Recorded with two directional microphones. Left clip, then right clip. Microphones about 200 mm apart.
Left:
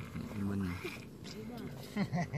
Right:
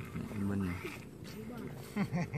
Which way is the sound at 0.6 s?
30° left (ahead or behind).